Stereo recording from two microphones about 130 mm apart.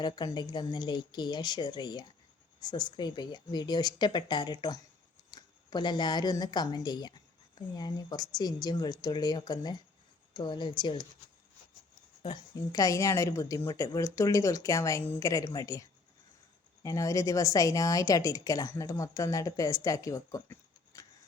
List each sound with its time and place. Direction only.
0.0 s speech: 35° left (ahead or behind)
12.2 s speech: 30° left (ahead or behind)
16.8 s speech: 25° left (ahead or behind)